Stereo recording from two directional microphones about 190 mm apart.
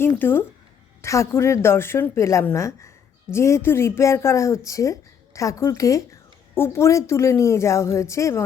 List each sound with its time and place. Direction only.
0.0 s speech: 10° left (ahead or behind)